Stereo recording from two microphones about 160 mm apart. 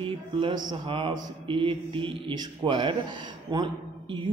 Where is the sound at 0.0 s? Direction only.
35° right (ahead or behind).